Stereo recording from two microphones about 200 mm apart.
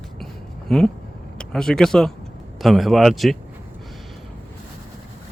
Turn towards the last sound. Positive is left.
turn(degrees=0)  # may be behind; listen again after turning